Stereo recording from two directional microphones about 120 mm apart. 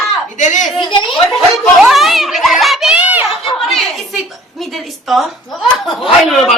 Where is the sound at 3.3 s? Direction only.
Centre (ahead or behind).